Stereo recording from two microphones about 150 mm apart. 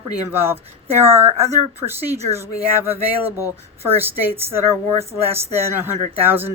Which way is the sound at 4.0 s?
15° right (ahead or behind).